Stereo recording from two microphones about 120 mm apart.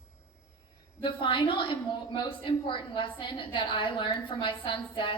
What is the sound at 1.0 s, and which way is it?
A woman's voice, 45° left (ahead or behind).